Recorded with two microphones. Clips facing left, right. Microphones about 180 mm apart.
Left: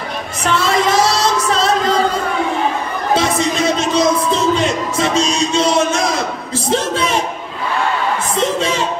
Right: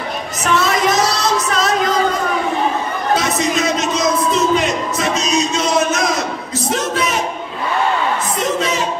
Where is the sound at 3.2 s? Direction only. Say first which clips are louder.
Left 1 dB; 30° left (ahead or behind).